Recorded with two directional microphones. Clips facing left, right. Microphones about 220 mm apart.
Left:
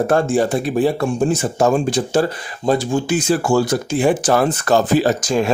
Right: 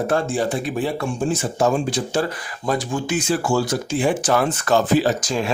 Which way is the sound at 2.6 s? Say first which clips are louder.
Left 5 dB; 30° left (ahead or behind).